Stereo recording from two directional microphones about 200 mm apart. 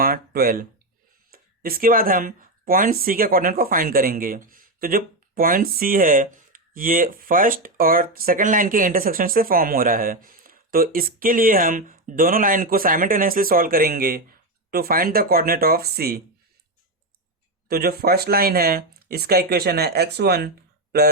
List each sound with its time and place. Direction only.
0.0 s a sound: 45° right (ahead or behind)
1.3 s speech: 45° right (ahead or behind)
17.7 s speech: 50° right (ahead or behind)